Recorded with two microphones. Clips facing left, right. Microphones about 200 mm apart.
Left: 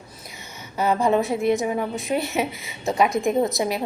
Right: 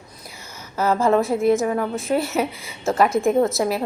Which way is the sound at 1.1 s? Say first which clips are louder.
Right 3 dB; centre (ahead or behind).